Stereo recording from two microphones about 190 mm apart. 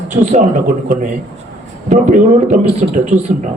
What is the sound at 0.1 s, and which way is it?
Speech, 40° right (ahead or behind).